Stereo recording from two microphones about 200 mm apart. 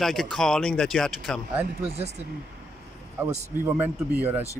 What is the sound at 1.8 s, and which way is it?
Speech, 30° right (ahead or behind).